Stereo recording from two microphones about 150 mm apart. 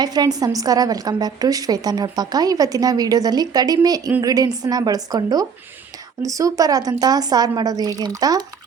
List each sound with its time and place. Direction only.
0.0 s a woman's voice: 25° right (ahead or behind)